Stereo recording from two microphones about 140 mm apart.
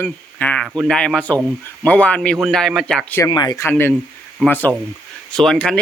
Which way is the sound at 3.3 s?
30° left (ahead or behind).